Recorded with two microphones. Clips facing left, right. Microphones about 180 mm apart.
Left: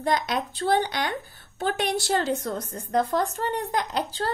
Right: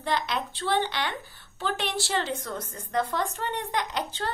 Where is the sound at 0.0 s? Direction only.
45° left (ahead or behind).